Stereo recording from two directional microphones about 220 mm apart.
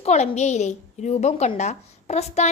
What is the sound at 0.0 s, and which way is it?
A woman's voice, 30° left (ahead or behind).